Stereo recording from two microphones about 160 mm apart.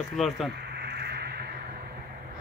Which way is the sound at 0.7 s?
90° right.